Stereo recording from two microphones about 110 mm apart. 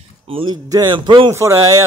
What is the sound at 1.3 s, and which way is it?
Speech, 25° right (ahead or behind).